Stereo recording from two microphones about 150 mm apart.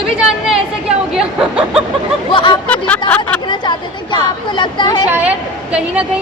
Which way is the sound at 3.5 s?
30° left (ahead or behind).